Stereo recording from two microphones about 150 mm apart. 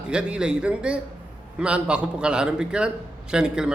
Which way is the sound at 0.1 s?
5° right (ahead or behind).